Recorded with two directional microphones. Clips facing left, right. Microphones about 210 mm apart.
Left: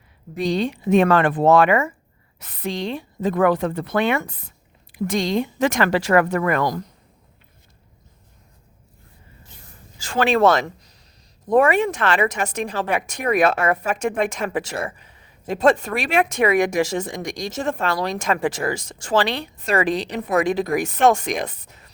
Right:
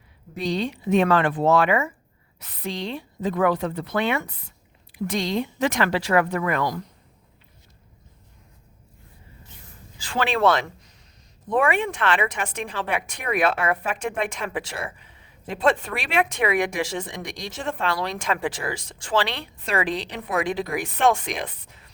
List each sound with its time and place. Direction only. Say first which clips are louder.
0.3 s speech: left 4 dB; 50° left (ahead or behind)
10.0 s speech: left 5 dB; 45° left (ahead or behind)